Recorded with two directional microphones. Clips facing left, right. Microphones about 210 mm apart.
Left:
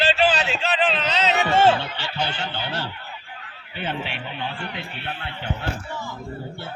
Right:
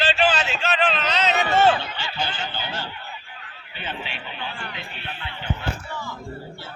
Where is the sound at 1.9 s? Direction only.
70° left (ahead or behind).